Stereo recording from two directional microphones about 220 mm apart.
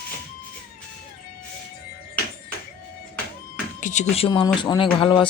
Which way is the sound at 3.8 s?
35° left (ahead or behind).